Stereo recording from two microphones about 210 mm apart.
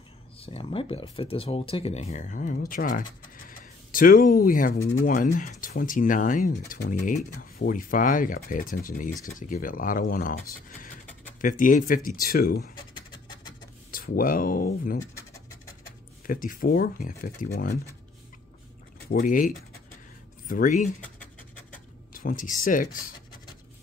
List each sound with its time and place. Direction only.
0.4 s speech: 25° left (ahead or behind)
11.4 s speech: 40° left (ahead or behind)
13.9 s speech: 40° left (ahead or behind)
16.3 s speech: 40° left (ahead or behind)
19.0 s speech: 45° left (ahead or behind)
22.1 s speech: 40° left (ahead or behind)